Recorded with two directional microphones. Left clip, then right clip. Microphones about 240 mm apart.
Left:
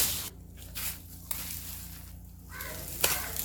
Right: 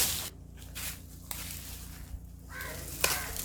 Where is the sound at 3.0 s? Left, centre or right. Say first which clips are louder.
Even; centre.